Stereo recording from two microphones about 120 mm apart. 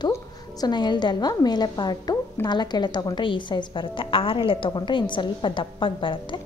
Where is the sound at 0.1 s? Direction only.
35° left (ahead or behind).